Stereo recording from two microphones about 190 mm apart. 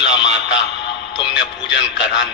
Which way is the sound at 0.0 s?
70° left (ahead or behind).